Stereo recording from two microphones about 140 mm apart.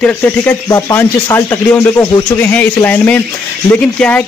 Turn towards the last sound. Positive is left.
turn(degrees=10)  # may be behind; listen again after turning